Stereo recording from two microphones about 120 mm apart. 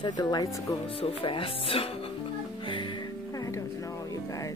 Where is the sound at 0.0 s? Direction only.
35° left (ahead or behind).